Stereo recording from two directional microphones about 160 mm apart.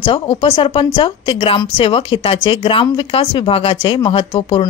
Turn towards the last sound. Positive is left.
turn(degrees=30)  # may be behind; listen again after turning